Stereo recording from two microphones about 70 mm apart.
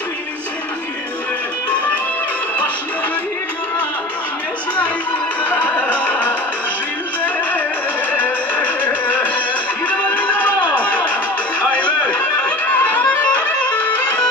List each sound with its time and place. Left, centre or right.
5.4 s music: left
8.1 s music: left